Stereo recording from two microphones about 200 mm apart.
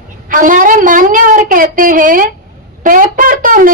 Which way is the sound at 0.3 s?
40° right (ahead or behind).